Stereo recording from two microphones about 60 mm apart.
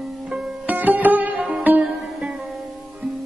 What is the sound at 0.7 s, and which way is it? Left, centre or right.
Sitar, right.